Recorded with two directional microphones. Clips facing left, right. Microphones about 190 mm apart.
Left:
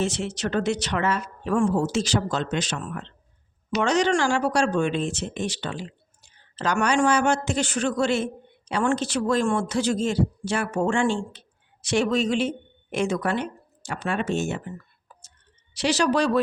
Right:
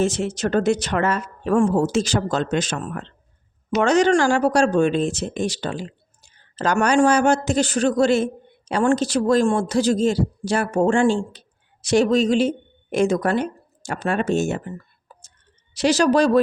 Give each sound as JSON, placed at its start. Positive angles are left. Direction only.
{"t": 0.0, "sound": "a woman's voice", "side_deg": -45}